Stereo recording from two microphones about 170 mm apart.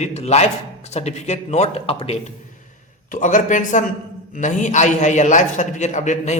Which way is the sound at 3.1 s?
50° left (ahead or behind).